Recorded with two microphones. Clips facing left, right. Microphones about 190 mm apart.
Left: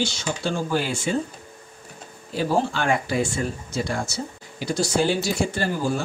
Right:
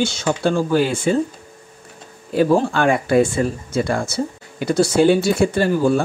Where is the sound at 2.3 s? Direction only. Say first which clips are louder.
Right 7 dB; 55° right (ahead or behind).